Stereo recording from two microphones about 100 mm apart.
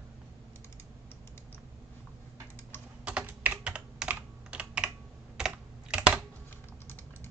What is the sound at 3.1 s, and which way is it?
Computer keyboard, 15° right (ahead or behind).